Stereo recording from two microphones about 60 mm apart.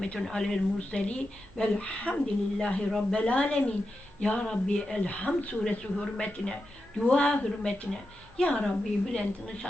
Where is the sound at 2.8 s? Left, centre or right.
Centre.